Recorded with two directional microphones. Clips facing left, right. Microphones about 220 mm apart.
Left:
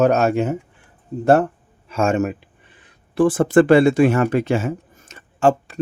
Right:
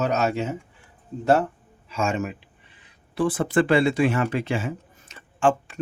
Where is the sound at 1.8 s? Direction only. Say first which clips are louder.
Left 7 dB; 50° left (ahead or behind).